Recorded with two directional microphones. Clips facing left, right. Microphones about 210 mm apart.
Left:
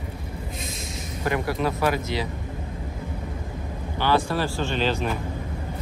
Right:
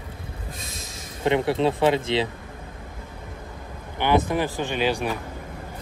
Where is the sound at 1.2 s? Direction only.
25° right (ahead or behind).